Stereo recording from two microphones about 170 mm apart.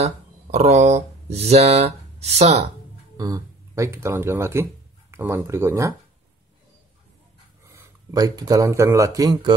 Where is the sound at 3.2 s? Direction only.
20° right (ahead or behind).